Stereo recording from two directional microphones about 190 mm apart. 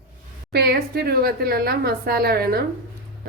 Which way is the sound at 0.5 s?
55° right (ahead or behind).